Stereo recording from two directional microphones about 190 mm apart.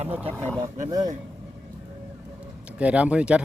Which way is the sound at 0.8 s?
20° right (ahead or behind).